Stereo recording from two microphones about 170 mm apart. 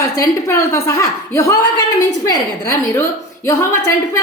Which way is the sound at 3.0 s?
15° left (ahead or behind).